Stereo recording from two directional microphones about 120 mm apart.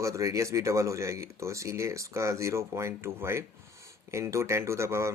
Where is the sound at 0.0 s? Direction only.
25° right (ahead or behind).